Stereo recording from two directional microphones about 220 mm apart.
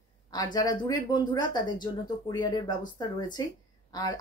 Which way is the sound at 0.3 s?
20° left (ahead or behind).